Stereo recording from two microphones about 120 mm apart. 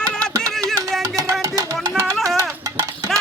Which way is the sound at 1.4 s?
30° right (ahead or behind).